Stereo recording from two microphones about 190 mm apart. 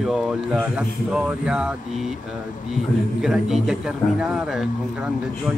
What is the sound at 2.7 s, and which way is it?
Speech, 5° right (ahead or behind).